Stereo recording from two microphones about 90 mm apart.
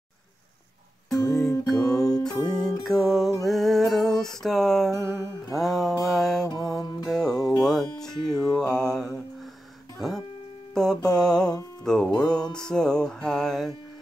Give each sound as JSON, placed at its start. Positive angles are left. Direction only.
{"t": 1.1, "sound": "music", "side_deg": 45}
{"t": 1.7, "sound": "music", "side_deg": 5}
{"t": 3.4, "sound": "a sound", "side_deg": 0}
{"t": 5.5, "sound": "music", "side_deg": 0}
{"t": 6.0, "sound": "mantra", "side_deg": 0}
{"t": 6.6, "sound": "music", "side_deg": 5}
{"t": 8.5, "sound": "mantra", "side_deg": 5}
{"t": 9.9, "sound": "music", "side_deg": 5}